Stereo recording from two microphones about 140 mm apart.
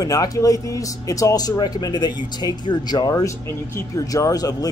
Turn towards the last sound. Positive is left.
turn(degrees=25)  # may be behind; listen again after turning